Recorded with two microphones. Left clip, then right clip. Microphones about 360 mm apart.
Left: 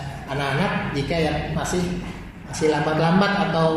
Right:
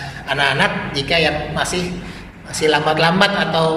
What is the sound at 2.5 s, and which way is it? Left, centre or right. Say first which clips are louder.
A woman's voice: right 5 dB; right.